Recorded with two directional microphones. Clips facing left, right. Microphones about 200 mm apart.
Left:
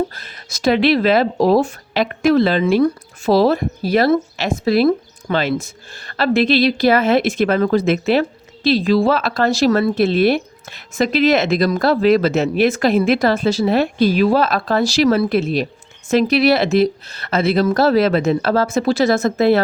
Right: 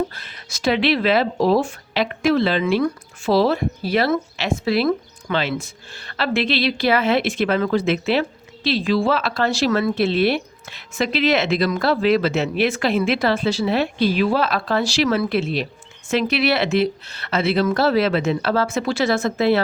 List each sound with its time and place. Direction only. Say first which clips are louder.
0.1 s a woman's voice: left 2 dB; 40° left (ahead or behind)